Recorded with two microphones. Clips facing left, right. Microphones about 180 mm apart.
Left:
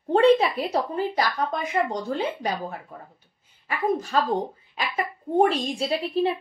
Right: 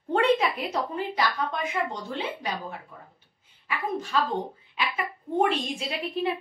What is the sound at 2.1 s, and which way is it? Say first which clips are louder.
Speech: left 5 dB; 40° left (ahead or behind).